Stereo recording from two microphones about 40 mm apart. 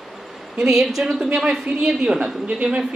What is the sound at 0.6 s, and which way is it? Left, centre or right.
A woman's voice, centre.